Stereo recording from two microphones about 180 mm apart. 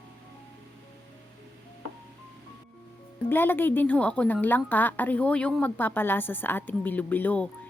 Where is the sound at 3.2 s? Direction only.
10° left (ahead or behind).